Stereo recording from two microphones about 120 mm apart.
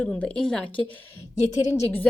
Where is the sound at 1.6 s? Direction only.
25° left (ahead or behind).